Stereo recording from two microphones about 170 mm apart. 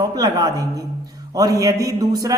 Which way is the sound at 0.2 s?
25° right (ahead or behind).